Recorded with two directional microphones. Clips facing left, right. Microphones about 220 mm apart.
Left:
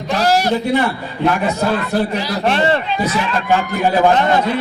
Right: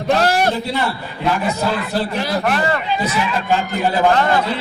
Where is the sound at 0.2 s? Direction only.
55° right (ahead or behind).